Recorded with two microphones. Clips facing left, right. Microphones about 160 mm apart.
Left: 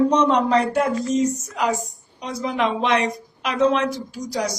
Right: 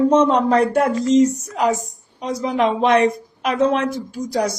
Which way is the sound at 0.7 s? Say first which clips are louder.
Right 5 dB; 70° right (ahead or behind).